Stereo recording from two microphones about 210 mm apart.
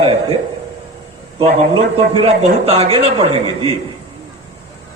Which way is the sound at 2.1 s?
25° right (ahead or behind).